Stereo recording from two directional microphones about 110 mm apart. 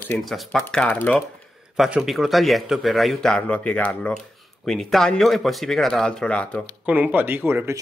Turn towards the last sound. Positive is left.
turn(degrees=-20)  # may be behind; listen again after turning